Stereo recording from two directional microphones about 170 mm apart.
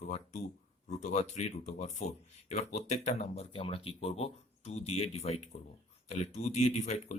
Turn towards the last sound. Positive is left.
turn(degrees=40)  # may be behind; listen again after turning